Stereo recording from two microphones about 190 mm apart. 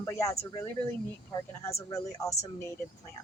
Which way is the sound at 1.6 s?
15° left (ahead or behind).